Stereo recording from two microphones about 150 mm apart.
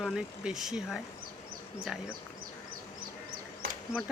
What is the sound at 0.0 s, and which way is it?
Speech, 5° right (ahead or behind).